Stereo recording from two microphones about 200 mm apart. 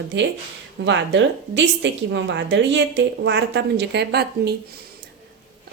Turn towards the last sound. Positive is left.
turn(degrees=-55)  # may be behind; listen again after turning